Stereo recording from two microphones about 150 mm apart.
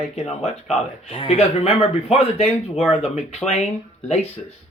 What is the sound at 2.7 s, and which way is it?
Speech, 5° right (ahead or behind).